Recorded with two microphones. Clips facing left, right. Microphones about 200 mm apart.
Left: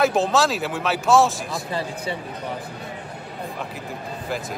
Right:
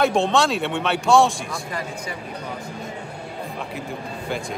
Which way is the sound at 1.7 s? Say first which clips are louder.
Left 3 dB; 30° left (ahead or behind).